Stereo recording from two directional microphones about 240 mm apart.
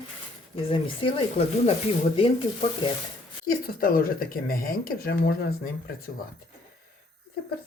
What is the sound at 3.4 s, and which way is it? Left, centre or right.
Speech, left.